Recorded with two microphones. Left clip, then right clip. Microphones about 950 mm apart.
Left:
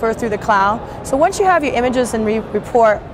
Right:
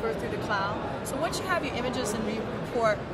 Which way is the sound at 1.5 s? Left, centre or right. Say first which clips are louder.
Left 14 dB; left.